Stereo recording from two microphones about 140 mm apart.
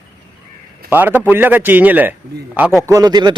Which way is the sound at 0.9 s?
15° right (ahead or behind).